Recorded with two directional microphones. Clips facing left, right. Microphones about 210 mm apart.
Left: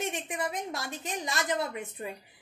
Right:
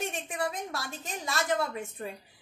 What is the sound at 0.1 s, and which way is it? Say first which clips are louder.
A woman's voice: even; 20° left (ahead or behind).